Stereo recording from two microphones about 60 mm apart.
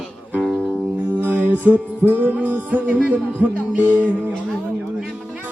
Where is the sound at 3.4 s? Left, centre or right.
Right.